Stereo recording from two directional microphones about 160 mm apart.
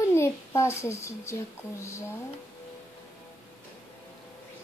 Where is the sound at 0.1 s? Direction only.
15° left (ahead or behind).